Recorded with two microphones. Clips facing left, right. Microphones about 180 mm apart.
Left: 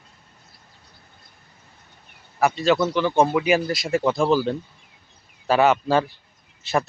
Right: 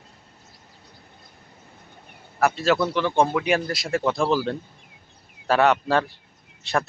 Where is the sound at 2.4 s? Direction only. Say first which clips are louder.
Left 1 dB; centre (ahead or behind).